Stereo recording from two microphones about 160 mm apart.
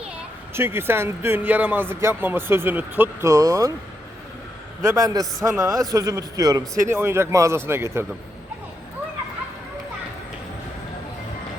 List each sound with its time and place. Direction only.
0.5 s speech: 15° right (ahead or behind)
4.8 s a man's voice: 20° right (ahead or behind)